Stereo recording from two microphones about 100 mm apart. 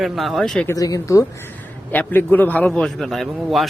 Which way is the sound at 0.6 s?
35° left (ahead or behind).